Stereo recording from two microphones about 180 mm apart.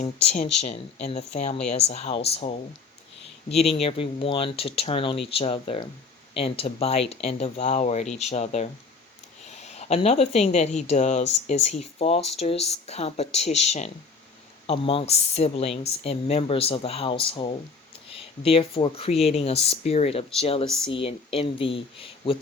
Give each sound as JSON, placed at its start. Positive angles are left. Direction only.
{"t": 0.0, "sound": "speech", "side_deg": 35}
{"t": 3.5, "sound": "speech", "side_deg": 35}